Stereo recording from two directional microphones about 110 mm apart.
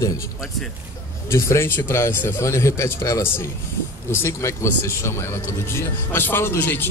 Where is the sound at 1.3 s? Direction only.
25° left (ahead or behind).